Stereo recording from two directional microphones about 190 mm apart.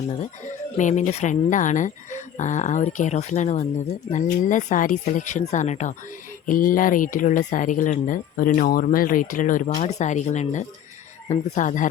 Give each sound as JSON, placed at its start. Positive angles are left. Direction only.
{"t": 0.8, "sound": "speech", "side_deg": 40}